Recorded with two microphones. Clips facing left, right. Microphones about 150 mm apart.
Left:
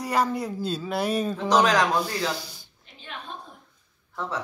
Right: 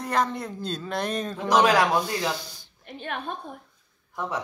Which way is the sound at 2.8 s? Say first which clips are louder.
Right 8 dB; 55° right (ahead or behind).